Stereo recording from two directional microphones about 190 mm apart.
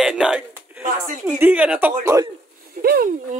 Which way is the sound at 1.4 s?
5° right (ahead or behind).